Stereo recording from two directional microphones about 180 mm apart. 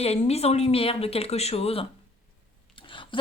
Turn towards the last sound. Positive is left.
turn(degrees=25)  # may be behind; listen again after turning